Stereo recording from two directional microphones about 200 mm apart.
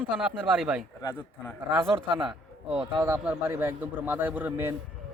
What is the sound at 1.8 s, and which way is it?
A man's voice, 25° right (ahead or behind).